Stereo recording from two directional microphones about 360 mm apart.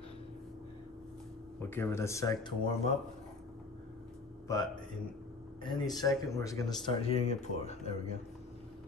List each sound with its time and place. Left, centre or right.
1.6 s speech: centre
4.5 s speech: centre
5.8 s speech: centre